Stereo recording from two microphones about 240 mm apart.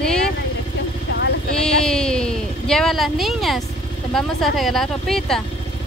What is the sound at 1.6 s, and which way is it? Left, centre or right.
Speech, centre.